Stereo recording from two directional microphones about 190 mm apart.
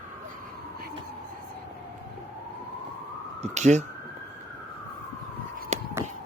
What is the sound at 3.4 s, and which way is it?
Speech, 40° right (ahead or behind).